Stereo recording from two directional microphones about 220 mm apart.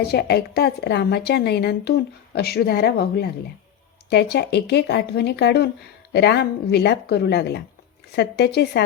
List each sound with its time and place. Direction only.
0.0 s a woman's voice: 45° left (ahead or behind)